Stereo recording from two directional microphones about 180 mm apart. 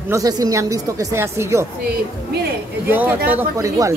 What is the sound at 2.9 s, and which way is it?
Speech, 10° right (ahead or behind).